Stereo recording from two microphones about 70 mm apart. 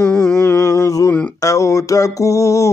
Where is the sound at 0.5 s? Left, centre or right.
Left.